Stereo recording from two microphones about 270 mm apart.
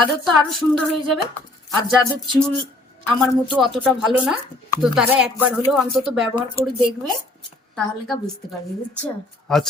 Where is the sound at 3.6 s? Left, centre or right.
Centre.